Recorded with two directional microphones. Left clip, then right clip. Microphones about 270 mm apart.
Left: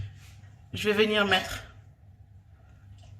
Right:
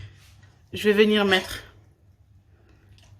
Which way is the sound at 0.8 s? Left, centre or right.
Right.